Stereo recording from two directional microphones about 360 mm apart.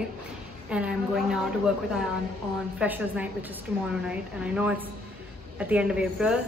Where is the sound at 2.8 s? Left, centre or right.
Centre.